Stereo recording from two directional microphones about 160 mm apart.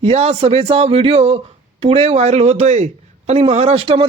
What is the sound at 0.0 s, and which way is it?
Speech, 40° right (ahead or behind).